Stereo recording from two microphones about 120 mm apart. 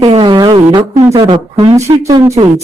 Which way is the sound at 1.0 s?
25° right (ahead or behind).